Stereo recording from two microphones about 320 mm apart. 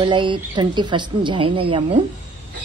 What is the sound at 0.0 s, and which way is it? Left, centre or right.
Speech, centre.